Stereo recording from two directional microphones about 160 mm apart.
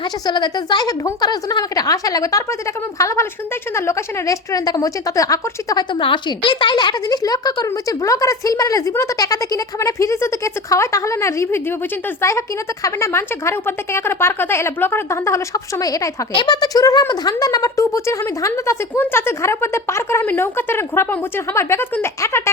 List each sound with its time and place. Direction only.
0.0 s a woman's voice: 30° left (ahead or behind)